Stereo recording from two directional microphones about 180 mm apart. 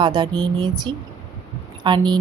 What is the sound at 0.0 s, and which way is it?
A woman's voice, 25° right (ahead or behind).